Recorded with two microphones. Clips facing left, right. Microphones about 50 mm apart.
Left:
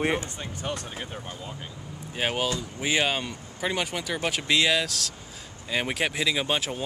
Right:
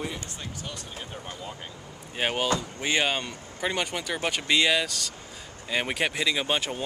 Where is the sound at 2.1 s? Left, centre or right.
Centre.